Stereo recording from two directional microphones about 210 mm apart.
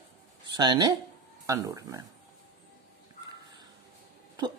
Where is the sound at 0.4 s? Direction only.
20° right (ahead or behind).